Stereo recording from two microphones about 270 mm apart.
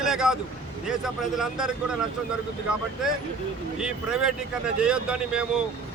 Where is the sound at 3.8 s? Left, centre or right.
Centre.